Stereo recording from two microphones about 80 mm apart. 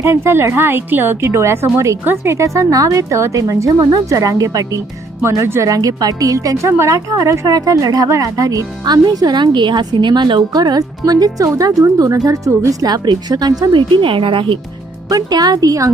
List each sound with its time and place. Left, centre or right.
0.0 s a woman's voice: right
6.7 s speech: right
10.5 s speech: right
12.8 s speech: right
15.1 s speech: right